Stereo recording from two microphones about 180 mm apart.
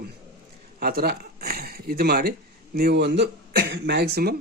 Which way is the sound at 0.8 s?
60° right (ahead or behind).